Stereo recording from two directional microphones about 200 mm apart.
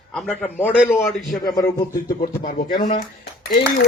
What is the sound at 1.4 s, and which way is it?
Speech, 20° left (ahead or behind).